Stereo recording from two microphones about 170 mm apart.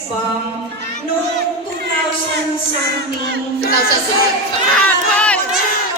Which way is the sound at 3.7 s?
65° left (ahead or behind).